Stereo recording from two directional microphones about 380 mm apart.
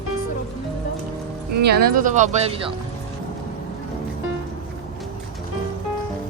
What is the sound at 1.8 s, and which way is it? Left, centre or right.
Speech, right.